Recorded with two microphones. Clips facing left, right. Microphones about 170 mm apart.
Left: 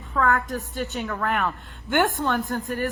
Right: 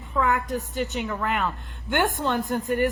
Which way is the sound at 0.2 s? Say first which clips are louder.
Left 1 dB; 15° right (ahead or behind).